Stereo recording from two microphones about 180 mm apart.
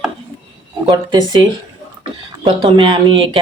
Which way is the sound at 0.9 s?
20° right (ahead or behind).